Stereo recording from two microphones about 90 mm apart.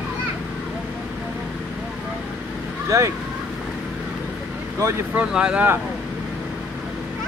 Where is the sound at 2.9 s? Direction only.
35° right (ahead or behind).